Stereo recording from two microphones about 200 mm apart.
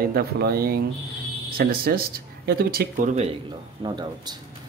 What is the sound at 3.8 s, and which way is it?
Speech, 20° right (ahead or behind).